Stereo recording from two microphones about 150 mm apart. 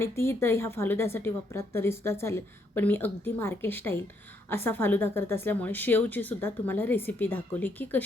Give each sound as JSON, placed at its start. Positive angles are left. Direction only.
{"t": 0.0, "sound": "a woman's voice", "side_deg": 15}